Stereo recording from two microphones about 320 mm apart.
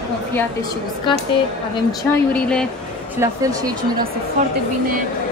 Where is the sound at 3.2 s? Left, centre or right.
Centre.